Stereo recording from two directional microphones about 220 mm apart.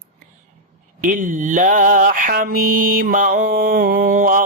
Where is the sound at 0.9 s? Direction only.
35° right (ahead or behind).